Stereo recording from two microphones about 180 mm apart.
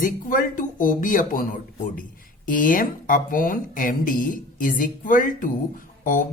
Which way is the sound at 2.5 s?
50° left (ahead or behind).